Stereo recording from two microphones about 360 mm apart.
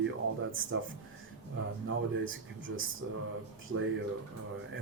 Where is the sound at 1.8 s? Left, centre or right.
Right.